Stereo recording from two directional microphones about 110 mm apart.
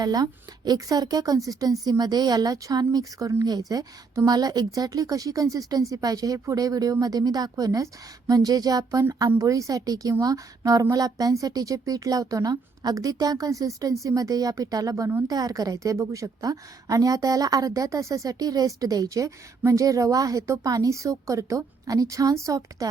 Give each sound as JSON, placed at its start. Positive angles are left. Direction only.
{"t": 0.0, "sound": "a woman's voice", "side_deg": -35}